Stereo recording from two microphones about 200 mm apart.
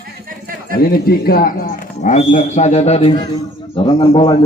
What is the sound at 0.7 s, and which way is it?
A man's voice, 50° left (ahead or behind).